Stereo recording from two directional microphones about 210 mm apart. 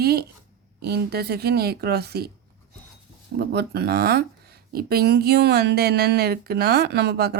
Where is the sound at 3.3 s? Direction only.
50° right (ahead or behind).